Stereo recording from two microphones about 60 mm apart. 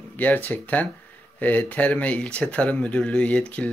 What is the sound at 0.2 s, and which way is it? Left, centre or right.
A man's voice, left.